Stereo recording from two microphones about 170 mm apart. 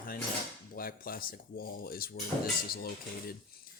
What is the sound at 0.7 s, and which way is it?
Speech, 60° left (ahead or behind).